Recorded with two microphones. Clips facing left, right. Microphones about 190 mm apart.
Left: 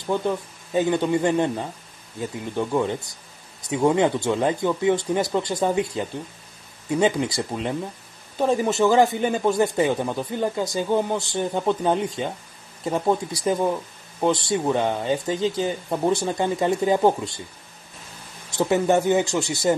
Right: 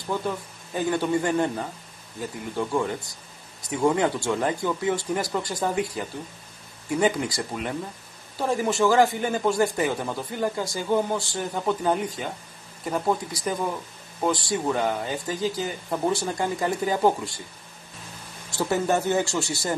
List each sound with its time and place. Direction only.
0.7 s speech: 20° left (ahead or behind)
18.6 s speech: 20° left (ahead or behind)